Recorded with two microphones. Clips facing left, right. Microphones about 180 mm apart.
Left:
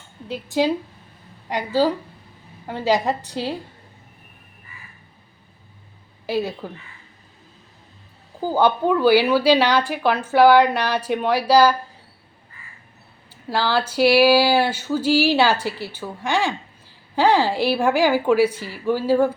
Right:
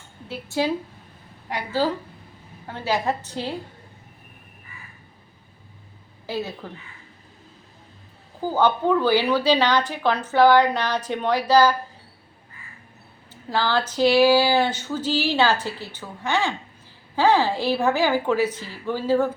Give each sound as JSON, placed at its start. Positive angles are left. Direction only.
{"t": 0.3, "sound": "a woman's voice", "side_deg": 15}
{"t": 6.2, "sound": "a woman's voice", "side_deg": 15}
{"t": 8.5, "sound": "a woman's voice", "side_deg": 10}
{"t": 13.5, "sound": "a woman's voice", "side_deg": 10}